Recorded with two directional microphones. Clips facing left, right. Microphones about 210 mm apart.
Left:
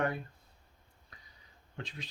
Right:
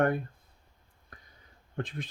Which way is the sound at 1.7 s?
50° right (ahead or behind).